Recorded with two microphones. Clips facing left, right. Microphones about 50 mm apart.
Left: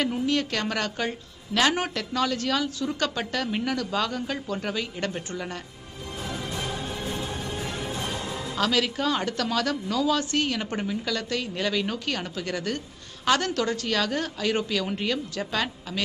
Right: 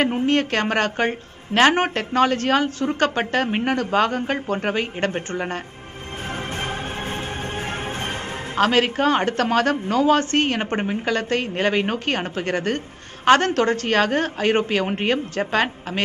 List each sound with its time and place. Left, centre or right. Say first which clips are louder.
0.0 s a woman's voice: right 6 dB; right
6.2 s music: right 4 dB; right